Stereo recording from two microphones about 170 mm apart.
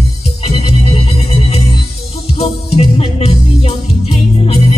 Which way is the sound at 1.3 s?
35° left (ahead or behind).